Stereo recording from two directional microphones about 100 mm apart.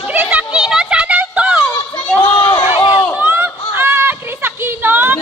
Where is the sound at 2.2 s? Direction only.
50° left (ahead or behind).